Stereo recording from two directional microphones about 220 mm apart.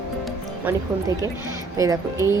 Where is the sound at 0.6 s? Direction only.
15° right (ahead or behind).